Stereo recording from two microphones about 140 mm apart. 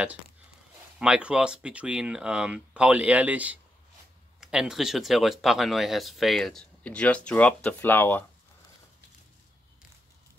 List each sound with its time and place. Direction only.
0.9 s speech: 5° right (ahead or behind); by 8.3 s 15° left (ahead or behind)